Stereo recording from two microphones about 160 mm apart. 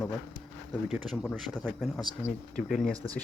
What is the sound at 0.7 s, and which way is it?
Speech, centre (ahead or behind).